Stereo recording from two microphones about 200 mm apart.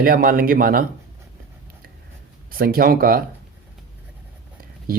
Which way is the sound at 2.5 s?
45° right (ahead or behind).